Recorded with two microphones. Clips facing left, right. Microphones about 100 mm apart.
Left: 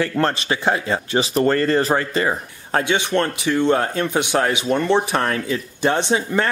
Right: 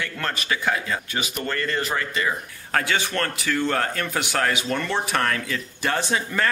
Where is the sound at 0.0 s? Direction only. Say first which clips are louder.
Left 9 dB; 35° left (ahead or behind).